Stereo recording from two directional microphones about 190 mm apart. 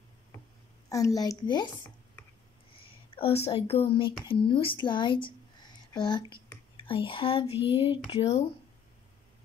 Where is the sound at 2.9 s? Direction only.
30° left (ahead or behind).